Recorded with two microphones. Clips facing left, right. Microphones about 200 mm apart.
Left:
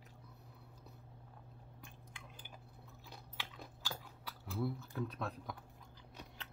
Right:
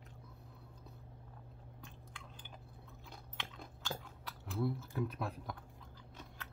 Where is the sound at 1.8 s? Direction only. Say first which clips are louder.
Right 2 dB; 10° left (ahead or behind).